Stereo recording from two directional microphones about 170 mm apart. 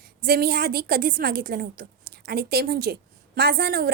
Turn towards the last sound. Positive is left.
turn(degrees=-65)  # may be behind; listen again after turning